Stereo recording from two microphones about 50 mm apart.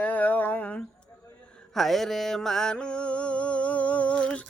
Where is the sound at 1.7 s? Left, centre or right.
Centre; by 4.4 s left.